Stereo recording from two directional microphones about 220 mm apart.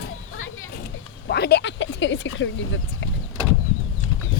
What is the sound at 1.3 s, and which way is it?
Speech, 50° left (ahead or behind).